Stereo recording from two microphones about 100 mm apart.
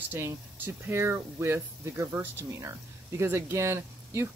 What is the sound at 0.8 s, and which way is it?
Speech, 25° right (ahead or behind).